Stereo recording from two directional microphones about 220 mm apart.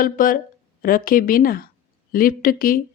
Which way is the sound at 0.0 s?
40° left (ahead or behind).